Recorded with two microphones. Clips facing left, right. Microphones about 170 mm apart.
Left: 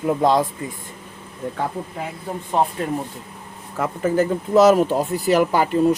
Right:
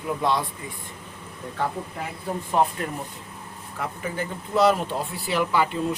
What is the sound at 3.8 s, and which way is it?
Speech, 45° left (ahead or behind).